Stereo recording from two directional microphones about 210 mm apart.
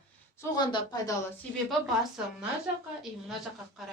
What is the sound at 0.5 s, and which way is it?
Speech, 20° left (ahead or behind).